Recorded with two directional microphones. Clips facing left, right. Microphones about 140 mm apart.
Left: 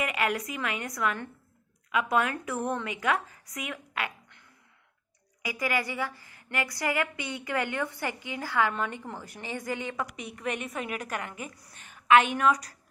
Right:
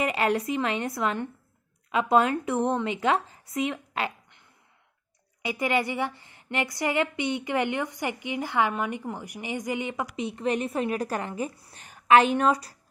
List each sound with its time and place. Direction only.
0.0 s a woman's voice: 30° right (ahead or behind)